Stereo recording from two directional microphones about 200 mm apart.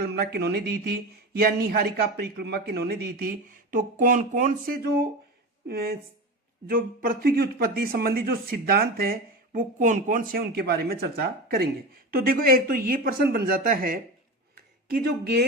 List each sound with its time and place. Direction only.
0.0 s speech: 50° right (ahead or behind)